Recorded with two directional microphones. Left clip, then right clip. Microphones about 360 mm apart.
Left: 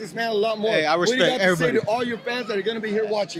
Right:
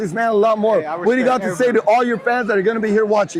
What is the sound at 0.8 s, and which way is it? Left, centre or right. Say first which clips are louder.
Speech: left 3 dB; left.